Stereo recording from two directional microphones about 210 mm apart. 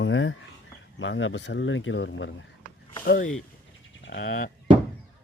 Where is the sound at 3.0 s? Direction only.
40° left (ahead or behind).